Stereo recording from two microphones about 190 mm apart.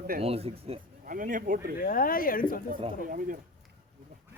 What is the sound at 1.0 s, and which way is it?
Speech, 45° right (ahead or behind).